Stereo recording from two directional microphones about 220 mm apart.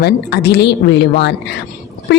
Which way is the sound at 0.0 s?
50° left (ahead or behind).